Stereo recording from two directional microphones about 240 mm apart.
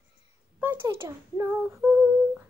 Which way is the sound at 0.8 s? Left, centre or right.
Centre.